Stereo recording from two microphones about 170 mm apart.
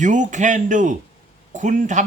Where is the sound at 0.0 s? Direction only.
45° right (ahead or behind).